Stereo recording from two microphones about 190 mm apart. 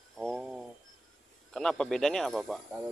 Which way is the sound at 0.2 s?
Centre (ahead or behind).